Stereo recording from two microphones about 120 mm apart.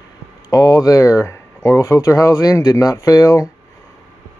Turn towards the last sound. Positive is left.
turn(degrees=30)  # may be behind; listen again after turning